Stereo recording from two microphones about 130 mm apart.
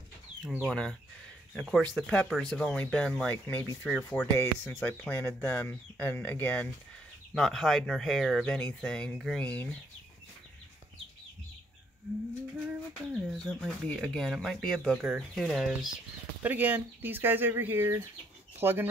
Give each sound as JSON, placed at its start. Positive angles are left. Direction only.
{"t": 0.7, "sound": "speech", "side_deg": 5}
{"t": 4.4, "sound": "speech", "side_deg": 20}
{"t": 7.3, "sound": "speech", "side_deg": 0}
{"t": 13.1, "sound": "speech", "side_deg": 0}
{"t": 16.4, "sound": "speech", "side_deg": -15}